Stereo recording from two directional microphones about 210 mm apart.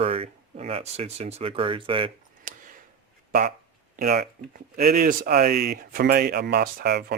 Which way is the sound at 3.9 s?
45° right (ahead or behind).